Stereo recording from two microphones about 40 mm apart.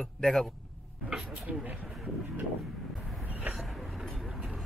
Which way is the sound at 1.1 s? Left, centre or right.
Right.